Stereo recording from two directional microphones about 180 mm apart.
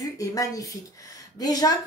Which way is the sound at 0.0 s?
20° left (ahead or behind).